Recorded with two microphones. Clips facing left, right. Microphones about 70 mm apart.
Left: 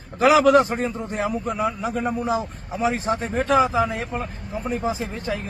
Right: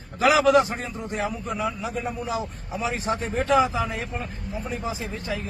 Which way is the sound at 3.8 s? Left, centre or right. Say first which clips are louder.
Left 5 dB; left.